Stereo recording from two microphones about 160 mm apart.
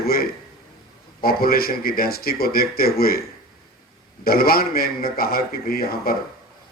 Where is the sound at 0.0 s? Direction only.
70° left (ahead or behind).